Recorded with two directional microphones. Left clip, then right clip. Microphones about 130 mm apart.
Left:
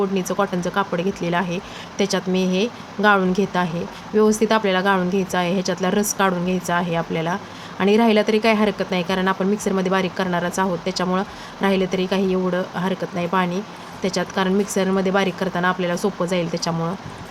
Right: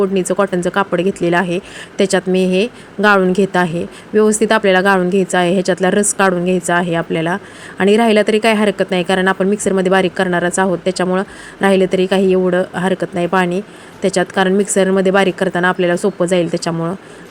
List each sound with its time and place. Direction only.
0.0 s speech: 50° right (ahead or behind)